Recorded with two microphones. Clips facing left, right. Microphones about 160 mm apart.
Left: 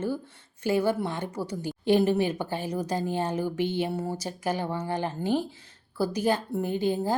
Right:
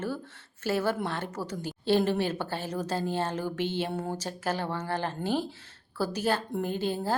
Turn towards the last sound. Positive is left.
turn(degrees=15)  # may be behind; listen again after turning